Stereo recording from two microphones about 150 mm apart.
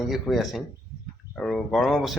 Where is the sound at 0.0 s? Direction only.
Centre (ahead or behind).